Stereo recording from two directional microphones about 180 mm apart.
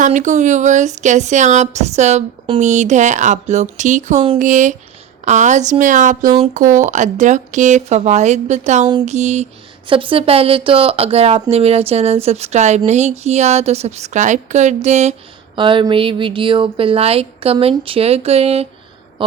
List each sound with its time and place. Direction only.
0.0 s a woman's voice: 45° right (ahead or behind)
15.5 s speech: 25° right (ahead or behind)